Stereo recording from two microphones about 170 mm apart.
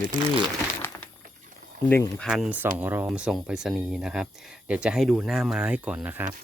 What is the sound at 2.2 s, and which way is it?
Speech, centre (ahead or behind).